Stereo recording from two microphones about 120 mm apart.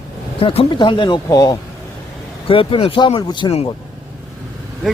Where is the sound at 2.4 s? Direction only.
45° left (ahead or behind).